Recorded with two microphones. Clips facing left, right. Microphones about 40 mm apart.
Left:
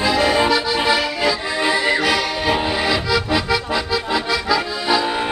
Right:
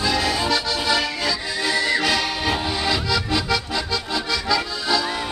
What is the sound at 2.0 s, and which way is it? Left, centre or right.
Accordion, centre.